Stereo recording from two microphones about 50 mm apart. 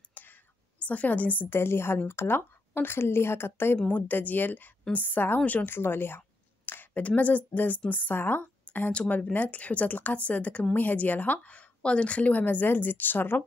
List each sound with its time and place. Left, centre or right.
0.2 s whispering: left
0.7 s a woman's voice: left
1.5 s a woman's voice: left
3.8 s speech: left
5.4 s speech: left
5.7 s a sound: left
6.9 s a woman's voice: left
8.9 s speech: left